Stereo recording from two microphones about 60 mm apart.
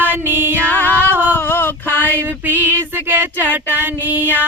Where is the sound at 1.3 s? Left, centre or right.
Left.